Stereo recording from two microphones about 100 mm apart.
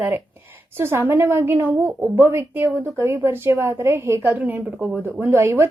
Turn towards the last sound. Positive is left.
turn(degrees=-25)  # may be behind; listen again after turning